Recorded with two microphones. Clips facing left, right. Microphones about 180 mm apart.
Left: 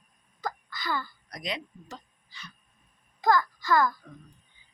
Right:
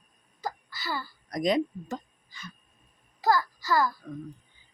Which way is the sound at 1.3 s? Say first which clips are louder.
Right 13 dB; 45° right (ahead or behind).